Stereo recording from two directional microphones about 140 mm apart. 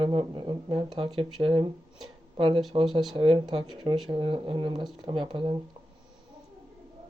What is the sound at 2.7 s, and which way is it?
Speech, 35° right (ahead or behind).